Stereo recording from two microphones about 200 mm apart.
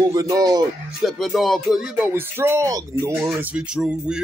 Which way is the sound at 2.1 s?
10° right (ahead or behind).